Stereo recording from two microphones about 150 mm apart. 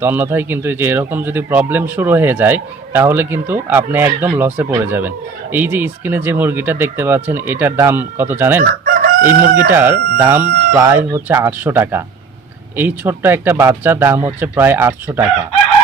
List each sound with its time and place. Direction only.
0.0 s speech: 15° right (ahead or behind)
8.6 s chicken: 65° right (ahead or behind)
9.6 s speech: 15° right (ahead or behind)